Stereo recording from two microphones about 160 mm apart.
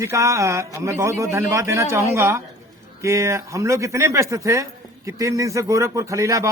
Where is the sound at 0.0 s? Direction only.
20° right (ahead or behind).